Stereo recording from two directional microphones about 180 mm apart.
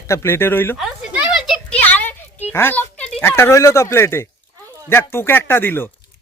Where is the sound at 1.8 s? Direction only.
10° left (ahead or behind).